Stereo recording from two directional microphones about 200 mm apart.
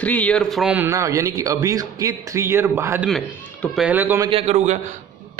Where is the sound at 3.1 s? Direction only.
Centre (ahead or behind).